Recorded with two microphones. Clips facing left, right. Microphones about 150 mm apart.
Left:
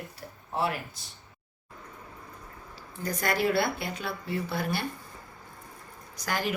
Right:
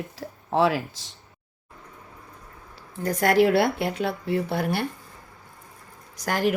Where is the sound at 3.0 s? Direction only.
85° right.